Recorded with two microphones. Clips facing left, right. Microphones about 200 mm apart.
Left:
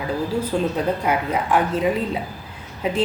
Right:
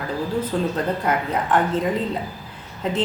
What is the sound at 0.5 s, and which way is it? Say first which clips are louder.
A woman's voice: left 3 dB; 10° left (ahead or behind).